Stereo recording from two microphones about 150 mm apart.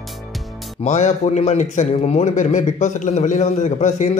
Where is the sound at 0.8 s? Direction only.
50° left (ahead or behind).